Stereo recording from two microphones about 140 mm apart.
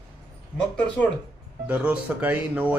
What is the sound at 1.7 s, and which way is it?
Speech, 10° right (ahead or behind).